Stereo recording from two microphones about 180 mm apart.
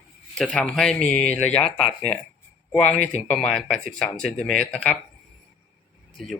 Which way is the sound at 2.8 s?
40° left (ahead or behind).